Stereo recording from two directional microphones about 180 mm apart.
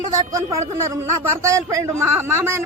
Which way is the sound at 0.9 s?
15° right (ahead or behind).